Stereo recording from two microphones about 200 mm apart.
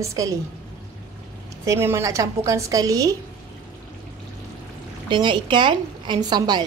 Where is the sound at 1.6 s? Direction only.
10° right (ahead or behind).